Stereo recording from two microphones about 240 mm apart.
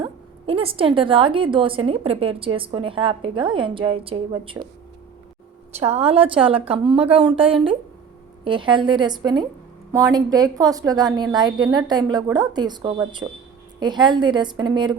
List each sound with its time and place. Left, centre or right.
0.0 s a woman's voice: right
5.7 s a woman's voice: right